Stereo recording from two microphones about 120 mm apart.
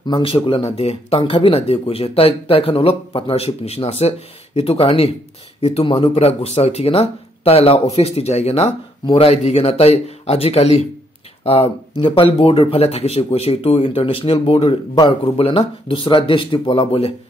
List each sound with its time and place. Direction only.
0.0 s speech: 45° left (ahead or behind)